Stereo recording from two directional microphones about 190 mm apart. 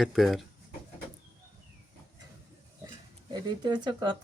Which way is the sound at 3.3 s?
20° right (ahead or behind).